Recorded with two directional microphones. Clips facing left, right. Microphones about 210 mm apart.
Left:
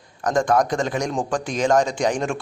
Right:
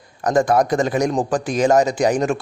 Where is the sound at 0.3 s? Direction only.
5° right (ahead or behind).